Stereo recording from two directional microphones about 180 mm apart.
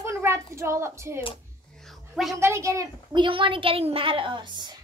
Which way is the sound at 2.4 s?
15° right (ahead or behind).